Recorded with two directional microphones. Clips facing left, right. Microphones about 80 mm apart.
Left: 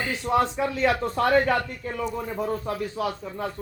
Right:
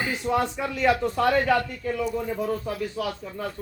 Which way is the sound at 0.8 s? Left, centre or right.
Left.